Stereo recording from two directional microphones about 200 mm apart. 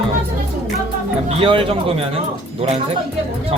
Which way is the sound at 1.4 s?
25° right (ahead or behind).